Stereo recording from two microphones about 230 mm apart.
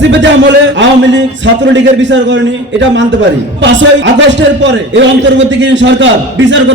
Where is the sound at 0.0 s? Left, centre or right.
Right.